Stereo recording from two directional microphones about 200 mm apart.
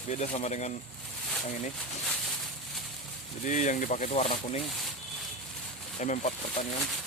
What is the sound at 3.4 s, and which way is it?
Speech, 40° left (ahead or behind).